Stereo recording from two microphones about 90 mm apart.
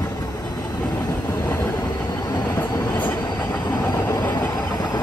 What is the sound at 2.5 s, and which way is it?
Train, 35° left (ahead or behind).